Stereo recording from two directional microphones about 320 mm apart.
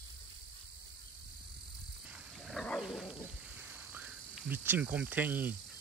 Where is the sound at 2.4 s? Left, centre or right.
Centre.